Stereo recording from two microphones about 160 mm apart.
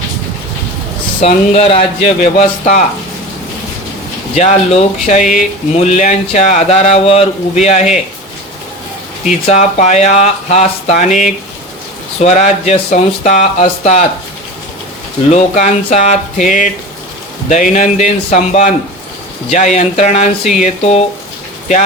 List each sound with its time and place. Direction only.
1.2 s speech: 35° left (ahead or behind)
4.4 s speech: 45° left (ahead or behind)
9.5 s speech: 45° left (ahead or behind)
15.3 s speech: 50° left (ahead or behind)